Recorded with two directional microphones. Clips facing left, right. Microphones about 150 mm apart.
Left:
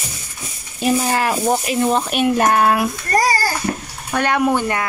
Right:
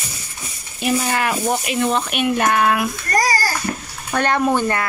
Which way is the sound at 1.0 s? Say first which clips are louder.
Left 2 dB; 30° left (ahead or behind).